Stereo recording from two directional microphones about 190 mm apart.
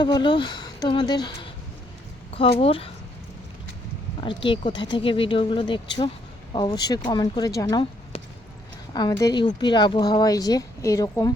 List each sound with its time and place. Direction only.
0.0 s speech: 25° left (ahead or behind)
4.2 s speech: 25° left (ahead or behind)